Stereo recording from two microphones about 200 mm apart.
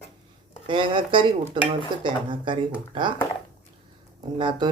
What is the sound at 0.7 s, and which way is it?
Speech, 25° right (ahead or behind).